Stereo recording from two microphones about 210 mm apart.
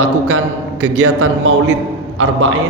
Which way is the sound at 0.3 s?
90° right.